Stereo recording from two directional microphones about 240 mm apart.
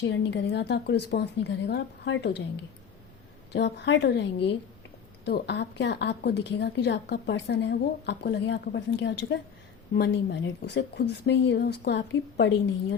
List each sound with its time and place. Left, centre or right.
0.0 s a woman's voice: left
3.5 s a woman's voice: left